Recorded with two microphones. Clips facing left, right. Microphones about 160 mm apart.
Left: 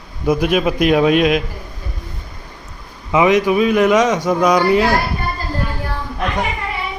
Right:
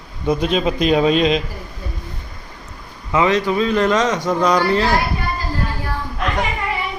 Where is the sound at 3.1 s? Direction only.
15° left (ahead or behind).